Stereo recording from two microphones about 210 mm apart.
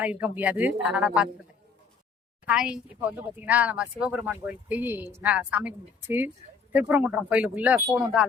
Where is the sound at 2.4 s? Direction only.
5° right (ahead or behind).